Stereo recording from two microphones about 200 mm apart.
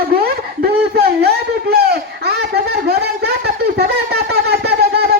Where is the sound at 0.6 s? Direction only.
50° right (ahead or behind).